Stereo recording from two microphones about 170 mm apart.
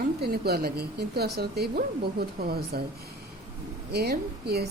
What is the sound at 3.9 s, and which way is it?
Speech, 70° right (ahead or behind).